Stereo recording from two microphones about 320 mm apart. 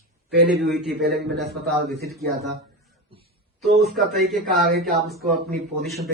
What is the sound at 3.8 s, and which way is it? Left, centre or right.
Speech, centre.